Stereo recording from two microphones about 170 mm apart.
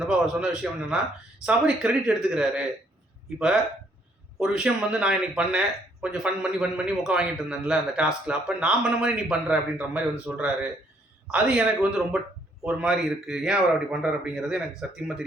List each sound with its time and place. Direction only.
0.1 s speech: 5° right (ahead or behind)